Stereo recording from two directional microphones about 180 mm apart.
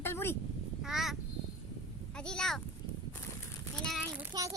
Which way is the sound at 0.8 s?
Centre (ahead or behind).